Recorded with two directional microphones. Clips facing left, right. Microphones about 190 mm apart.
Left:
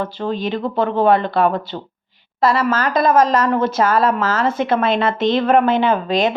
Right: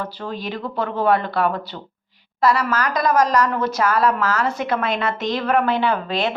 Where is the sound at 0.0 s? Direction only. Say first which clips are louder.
Left 6 dB; 25° left (ahead or behind).